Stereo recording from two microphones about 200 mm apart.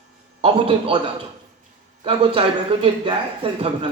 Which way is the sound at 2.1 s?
30° right (ahead or behind).